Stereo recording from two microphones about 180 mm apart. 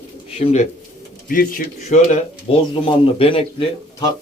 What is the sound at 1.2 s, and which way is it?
Speech, 50° left (ahead or behind).